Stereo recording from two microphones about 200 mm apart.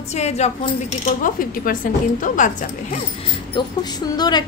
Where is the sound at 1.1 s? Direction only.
45° left (ahead or behind).